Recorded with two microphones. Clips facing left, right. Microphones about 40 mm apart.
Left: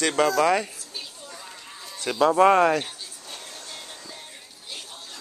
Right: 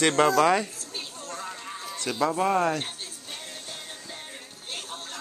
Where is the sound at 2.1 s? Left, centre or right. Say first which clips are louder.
Left 3 dB; left.